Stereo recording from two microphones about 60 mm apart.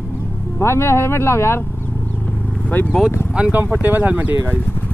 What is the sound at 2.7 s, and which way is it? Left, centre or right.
Speech, left.